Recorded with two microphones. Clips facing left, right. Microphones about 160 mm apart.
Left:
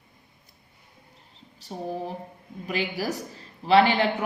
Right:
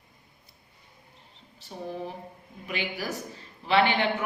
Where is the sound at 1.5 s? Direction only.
40° left (ahead or behind).